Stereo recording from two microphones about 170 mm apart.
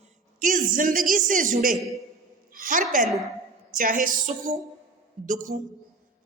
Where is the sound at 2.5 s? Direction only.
50° right (ahead or behind).